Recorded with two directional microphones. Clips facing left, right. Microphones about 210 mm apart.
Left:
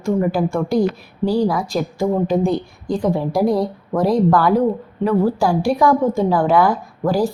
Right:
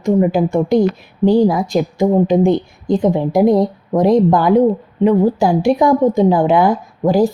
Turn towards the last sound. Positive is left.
turn(degrees=-20)  # may be behind; listen again after turning